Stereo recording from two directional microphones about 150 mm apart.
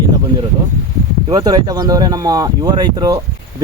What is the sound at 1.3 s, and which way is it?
Speech, 25° right (ahead or behind).